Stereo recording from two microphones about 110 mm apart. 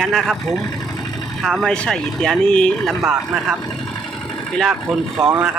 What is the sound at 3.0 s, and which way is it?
Speech, 10° right (ahead or behind).